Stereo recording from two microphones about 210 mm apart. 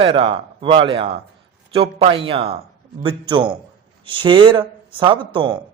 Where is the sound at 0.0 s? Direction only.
25° right (ahead or behind).